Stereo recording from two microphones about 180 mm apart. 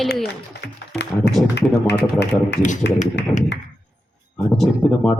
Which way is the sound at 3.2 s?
70° left (ahead or behind).